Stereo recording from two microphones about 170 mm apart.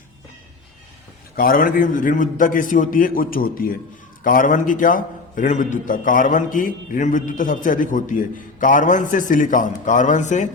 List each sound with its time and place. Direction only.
1.4 s a man's voice: 55° left (ahead or behind)